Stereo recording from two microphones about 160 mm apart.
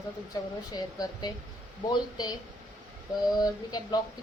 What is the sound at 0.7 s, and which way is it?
Speech, 25° left (ahead or behind).